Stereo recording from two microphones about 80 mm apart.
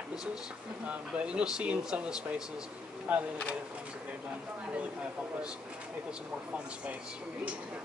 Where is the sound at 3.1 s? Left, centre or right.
Centre.